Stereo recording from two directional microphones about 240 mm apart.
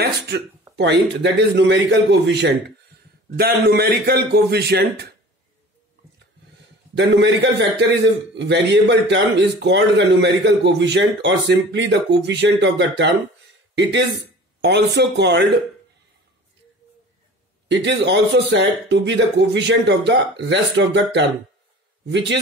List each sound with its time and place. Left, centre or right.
0.7 s a man's voice: right
7.0 s a man's voice: right
14.2 s speech: right
17.6 s a man's voice: right